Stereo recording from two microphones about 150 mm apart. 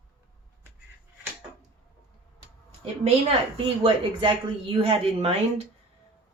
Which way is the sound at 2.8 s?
40° right (ahead or behind).